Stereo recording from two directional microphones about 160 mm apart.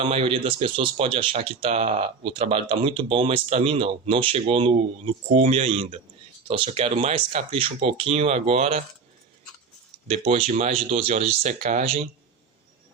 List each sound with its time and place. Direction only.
0.0 s speech: 35° right (ahead or behind)
10.1 s speech: 40° right (ahead or behind)